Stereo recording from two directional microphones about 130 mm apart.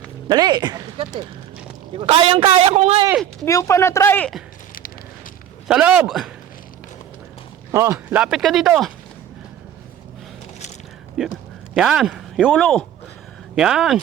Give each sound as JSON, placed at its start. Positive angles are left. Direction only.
{"t": 0.3, "sound": "speech", "side_deg": -30}
{"t": 1.9, "sound": "a man's voice", "side_deg": -45}
{"t": 3.4, "sound": "speech", "side_deg": 25}
{"t": 5.6, "sound": "speech", "side_deg": -5}
{"t": 7.7, "sound": "speech", "side_deg": -25}
{"t": 7.9, "sound": "speech", "side_deg": -10}
{"t": 11.2, "sound": "speech", "side_deg": -5}